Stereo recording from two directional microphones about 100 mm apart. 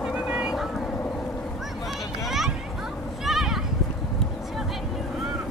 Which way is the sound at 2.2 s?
Centre (ahead or behind).